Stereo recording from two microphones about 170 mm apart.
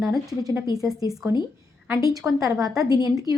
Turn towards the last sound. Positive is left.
turn(degrees=-20)  # may be behind; listen again after turning